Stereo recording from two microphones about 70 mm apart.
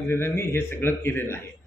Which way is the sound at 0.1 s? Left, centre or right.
Left.